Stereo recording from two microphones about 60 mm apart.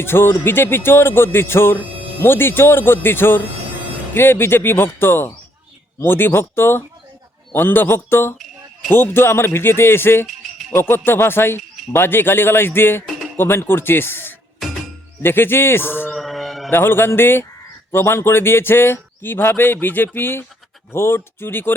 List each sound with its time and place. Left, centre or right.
0.0 s speech: left
16.0 s mantra: centre
16.7 s speech: left